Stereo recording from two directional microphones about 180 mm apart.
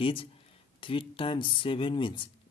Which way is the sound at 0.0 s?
30° left (ahead or behind).